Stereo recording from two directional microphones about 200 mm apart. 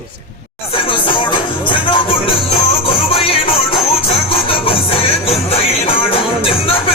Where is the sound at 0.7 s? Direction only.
25° left (ahead or behind).